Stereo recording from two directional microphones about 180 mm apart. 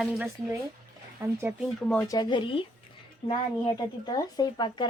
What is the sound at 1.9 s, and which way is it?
Speech, 15° left (ahead or behind).